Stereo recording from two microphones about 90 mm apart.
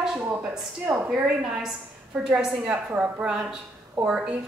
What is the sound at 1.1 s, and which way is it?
A woman's voice, 10° right (ahead or behind).